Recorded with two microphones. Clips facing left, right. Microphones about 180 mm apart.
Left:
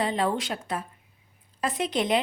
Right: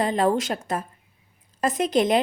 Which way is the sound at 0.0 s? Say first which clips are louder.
Right 5 dB; 45° right (ahead or behind).